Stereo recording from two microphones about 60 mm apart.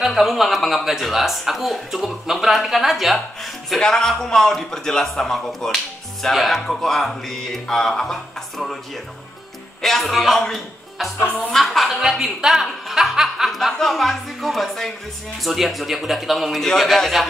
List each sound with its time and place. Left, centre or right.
0.0 s speech: centre
3.7 s a man's voice: centre
9.8 s a man's voice: centre
11.1 s speech: left
11.5 s speech: centre